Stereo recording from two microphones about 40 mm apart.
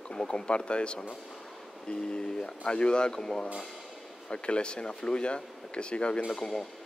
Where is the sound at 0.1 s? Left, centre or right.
Left.